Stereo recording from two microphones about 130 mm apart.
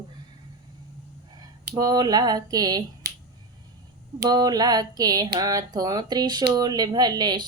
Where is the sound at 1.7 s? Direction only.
30° right (ahead or behind).